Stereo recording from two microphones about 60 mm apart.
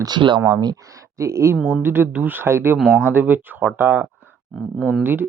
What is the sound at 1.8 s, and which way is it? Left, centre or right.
Speech, right.